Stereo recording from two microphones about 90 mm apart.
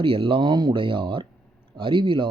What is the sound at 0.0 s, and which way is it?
A man's voice, 90° right.